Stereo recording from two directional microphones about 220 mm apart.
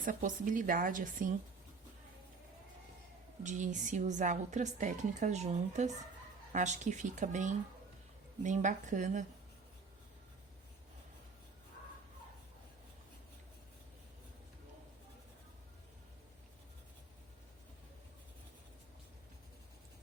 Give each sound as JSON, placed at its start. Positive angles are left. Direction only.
{"t": 0.0, "sound": "a woman's voice", "side_deg": -35}
{"t": 3.4, "sound": "a woman's voice", "side_deg": -35}